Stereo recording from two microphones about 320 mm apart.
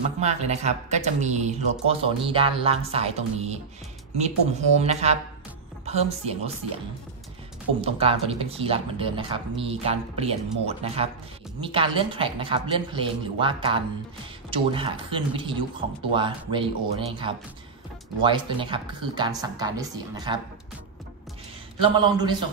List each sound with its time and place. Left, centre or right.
0.2 s speech: right
7.8 s speech: centre
21.8 s speech: centre